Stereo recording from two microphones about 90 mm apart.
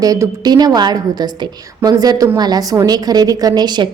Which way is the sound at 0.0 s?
40° right (ahead or behind).